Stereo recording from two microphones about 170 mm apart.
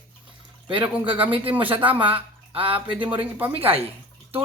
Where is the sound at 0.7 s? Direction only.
30° right (ahead or behind).